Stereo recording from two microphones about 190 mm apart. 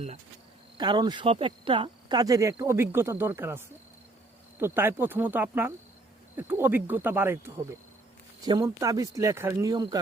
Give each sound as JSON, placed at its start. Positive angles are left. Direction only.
{"t": 0.8, "sound": "speech", "side_deg": -20}
{"t": 4.6, "sound": "speech", "side_deg": -10}